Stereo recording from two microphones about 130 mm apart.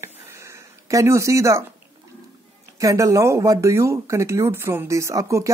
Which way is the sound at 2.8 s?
25° right (ahead or behind).